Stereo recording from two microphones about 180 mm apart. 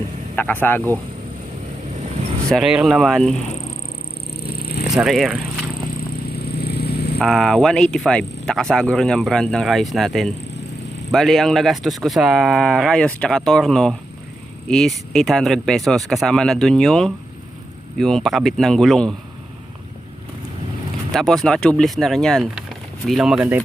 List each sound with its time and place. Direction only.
0.3 s speech: 10° left (ahead or behind)
2.5 s speech: 5° right (ahead or behind)
4.8 s speech: 5° right (ahead or behind)
6.6 s vehicle: 60° left (ahead or behind)
7.2 s speech: centre (ahead or behind)
21.1 s speech: centre (ahead or behind)